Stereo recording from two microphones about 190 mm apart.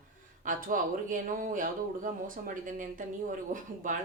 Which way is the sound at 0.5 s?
45° right (ahead or behind).